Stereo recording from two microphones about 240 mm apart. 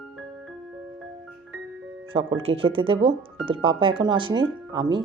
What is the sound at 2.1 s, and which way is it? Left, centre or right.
Speech, right.